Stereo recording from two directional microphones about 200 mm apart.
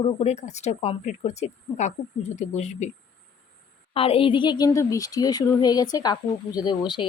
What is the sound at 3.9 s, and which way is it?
Speech, 30° left (ahead or behind).